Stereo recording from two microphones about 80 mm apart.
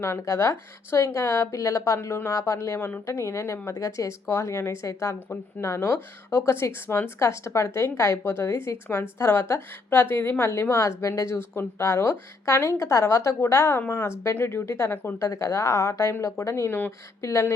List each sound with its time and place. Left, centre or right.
0.0 s a woman's voice: left